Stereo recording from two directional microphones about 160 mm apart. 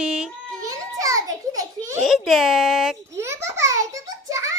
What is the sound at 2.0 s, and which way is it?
Speech, centre (ahead or behind).